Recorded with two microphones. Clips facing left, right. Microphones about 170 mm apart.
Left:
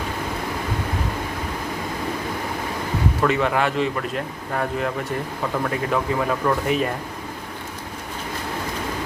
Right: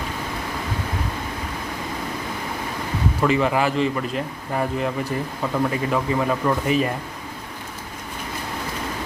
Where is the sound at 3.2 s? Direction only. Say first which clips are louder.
Right 1 dB; centre (ahead or behind).